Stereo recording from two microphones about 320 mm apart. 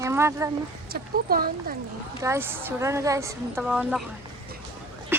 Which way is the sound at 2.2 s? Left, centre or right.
Centre.